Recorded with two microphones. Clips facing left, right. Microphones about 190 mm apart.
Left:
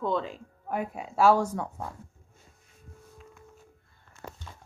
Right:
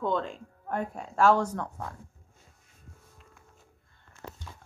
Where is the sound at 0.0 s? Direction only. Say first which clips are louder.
Even; centre (ahead or behind).